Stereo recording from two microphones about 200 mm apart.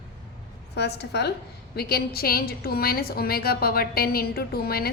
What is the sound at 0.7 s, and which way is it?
A woman's voice, 55° left (ahead or behind).